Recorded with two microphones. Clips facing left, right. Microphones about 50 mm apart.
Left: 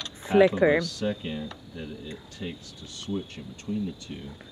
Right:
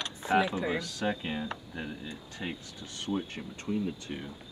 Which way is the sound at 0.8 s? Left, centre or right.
Right.